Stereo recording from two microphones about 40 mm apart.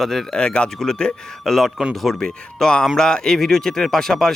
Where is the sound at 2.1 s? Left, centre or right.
Centre.